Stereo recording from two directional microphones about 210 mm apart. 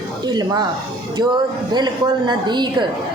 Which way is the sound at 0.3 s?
20° right (ahead or behind).